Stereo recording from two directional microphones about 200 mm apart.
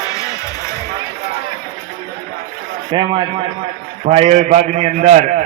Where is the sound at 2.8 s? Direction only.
25° right (ahead or behind).